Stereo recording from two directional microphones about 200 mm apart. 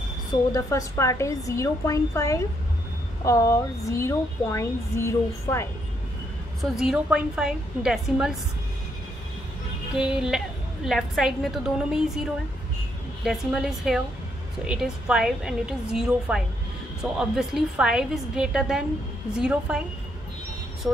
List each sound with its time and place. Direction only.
0.3 s a woman's voice: 15° left (ahead or behind)
6.6 s a woman's voice: centre (ahead or behind)
9.9 s a woman's voice: 5° right (ahead or behind)
13.2 s a woman's voice: centre (ahead or behind)